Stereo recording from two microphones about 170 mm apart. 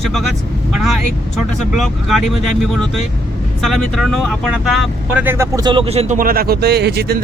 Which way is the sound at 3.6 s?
Centre (ahead or behind).